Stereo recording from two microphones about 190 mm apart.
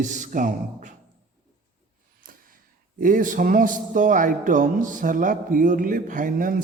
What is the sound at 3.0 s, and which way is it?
A man's voice, 45° right (ahead or behind).